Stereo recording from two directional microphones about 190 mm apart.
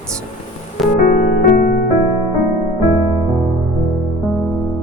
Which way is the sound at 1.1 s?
50° left (ahead or behind).